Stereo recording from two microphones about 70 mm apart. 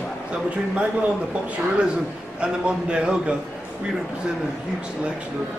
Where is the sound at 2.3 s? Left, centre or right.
Centre.